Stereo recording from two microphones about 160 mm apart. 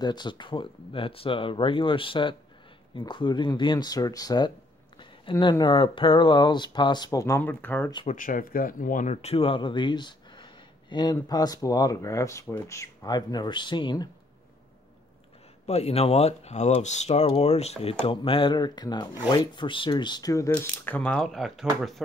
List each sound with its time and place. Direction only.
0.0 s speech: 25° left (ahead or behind); by 7.9 s 10° left (ahead or behind)
8.1 s speech: 55° left (ahead or behind); by 14.0 s 30° left (ahead or behind)
15.6 s speech: 40° left (ahead or behind); by 21.6 s centre (ahead or behind)